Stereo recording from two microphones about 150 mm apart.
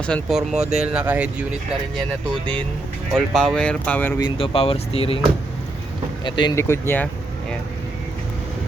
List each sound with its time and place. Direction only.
0.0 s speech: 5° left (ahead or behind)
3.1 s speech: 5° left (ahead or behind)
4.2 s speech: 35° left (ahead or behind)
6.2 s speech: 30° left (ahead or behind)
6.6 s speech: 15° left (ahead or behind)